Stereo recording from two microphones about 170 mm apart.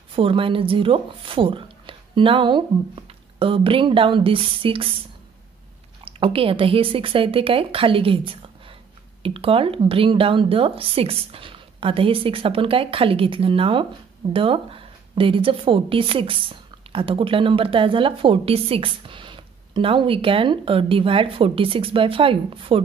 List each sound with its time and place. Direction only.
0.1 s a woman's voice: 30° right (ahead or behind)
6.0 s a woman's voice: 30° right (ahead or behind)